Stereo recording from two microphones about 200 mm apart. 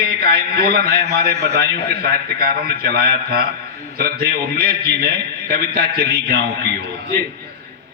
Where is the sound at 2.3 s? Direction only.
50° right (ahead or behind).